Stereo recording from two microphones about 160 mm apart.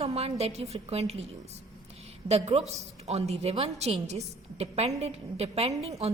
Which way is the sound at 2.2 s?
40° right (ahead or behind).